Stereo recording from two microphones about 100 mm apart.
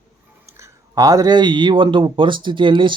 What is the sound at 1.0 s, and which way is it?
Speech, 40° right (ahead or behind).